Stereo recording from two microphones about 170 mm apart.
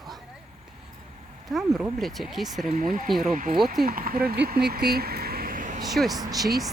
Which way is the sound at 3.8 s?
60° right (ahead or behind).